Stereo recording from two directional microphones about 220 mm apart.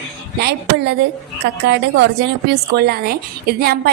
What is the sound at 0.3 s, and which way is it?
A woman's voice, 50° right (ahead or behind).